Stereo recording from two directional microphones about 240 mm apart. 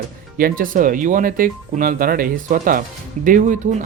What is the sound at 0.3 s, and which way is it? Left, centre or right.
Speech, right.